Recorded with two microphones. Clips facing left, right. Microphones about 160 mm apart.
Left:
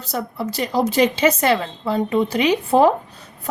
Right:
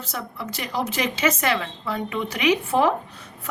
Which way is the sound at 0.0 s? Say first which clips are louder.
Left 7 dB; 35° left (ahead or behind).